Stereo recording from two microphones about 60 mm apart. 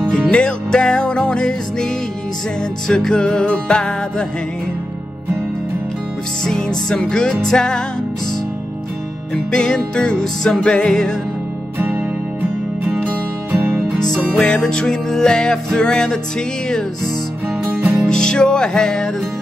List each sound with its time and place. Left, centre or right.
0.0 s music: centre
2.9 s music: centre
6.4 s music: centre
9.3 s music: centre
11.8 s music: right
13.7 s music: centre